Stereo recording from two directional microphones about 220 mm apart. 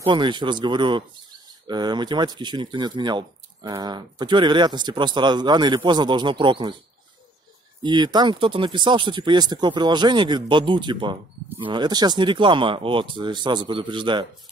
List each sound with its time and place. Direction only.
0.0 s speech: 20° right (ahead or behind)
7.8 s speech: 20° right (ahead or behind)